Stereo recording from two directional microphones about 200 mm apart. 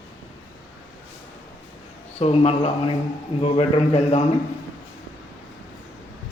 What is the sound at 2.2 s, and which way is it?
Speech, 30° left (ahead or behind).